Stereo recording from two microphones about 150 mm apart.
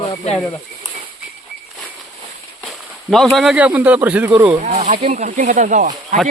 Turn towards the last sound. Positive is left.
turn(degrees=-60)  # may be behind; listen again after turning